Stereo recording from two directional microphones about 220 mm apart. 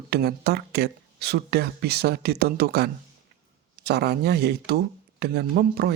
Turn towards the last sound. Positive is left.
turn(degrees=-45)  # may be behind; listen again after turning